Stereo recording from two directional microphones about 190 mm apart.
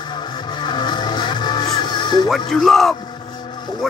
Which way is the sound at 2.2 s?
5° left (ahead or behind).